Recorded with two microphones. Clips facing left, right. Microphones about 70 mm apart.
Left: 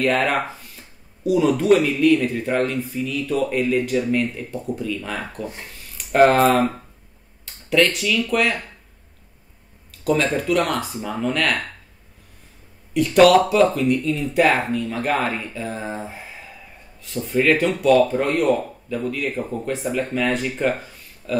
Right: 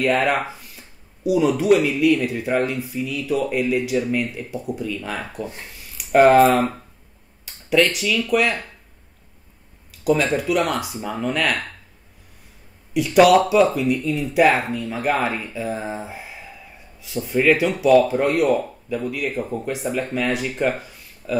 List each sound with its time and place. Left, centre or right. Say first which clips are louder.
0.0 s speech: even; centre
9.8 s speech: right 1 dB; centre
12.9 s speech: even; centre